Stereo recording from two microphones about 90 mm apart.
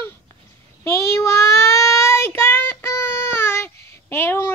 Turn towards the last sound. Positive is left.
turn(degrees=25)  # may be behind; listen again after turning